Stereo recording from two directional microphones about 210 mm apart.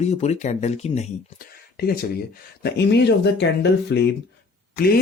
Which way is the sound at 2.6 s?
55° left (ahead or behind).